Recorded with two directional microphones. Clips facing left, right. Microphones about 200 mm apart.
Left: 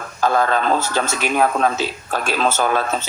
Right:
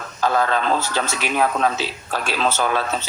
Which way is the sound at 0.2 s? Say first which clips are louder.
Left 2 dB; 50° left (ahead or behind).